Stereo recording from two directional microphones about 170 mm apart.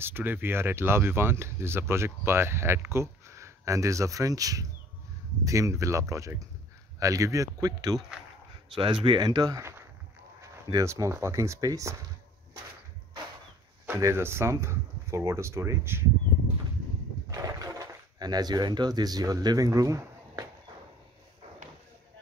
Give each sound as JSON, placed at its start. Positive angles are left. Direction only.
{"t": 0.0, "sound": "speech", "side_deg": -10}
{"t": 9.0, "sound": "speech", "side_deg": -25}
{"t": 13.8, "sound": "speech", "side_deg": -15}
{"t": 17.3, "sound": "speech", "side_deg": -20}